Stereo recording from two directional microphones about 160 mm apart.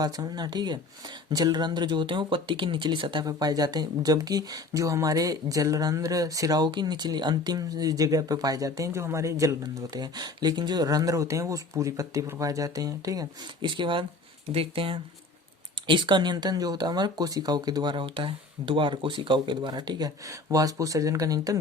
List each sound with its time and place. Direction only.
0.0 s speech: 25° right (ahead or behind)